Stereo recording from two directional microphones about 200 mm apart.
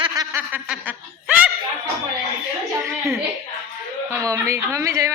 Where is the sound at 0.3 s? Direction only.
10° right (ahead or behind).